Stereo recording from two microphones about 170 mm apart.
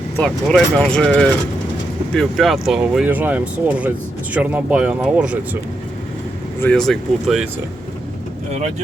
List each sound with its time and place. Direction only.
0.2 s speech: centre (ahead or behind)
6.6 s speech: 5° left (ahead or behind)